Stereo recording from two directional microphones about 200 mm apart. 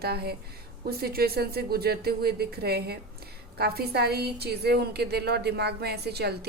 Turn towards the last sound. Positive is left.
turn(degrees=-55)  # may be behind; listen again after turning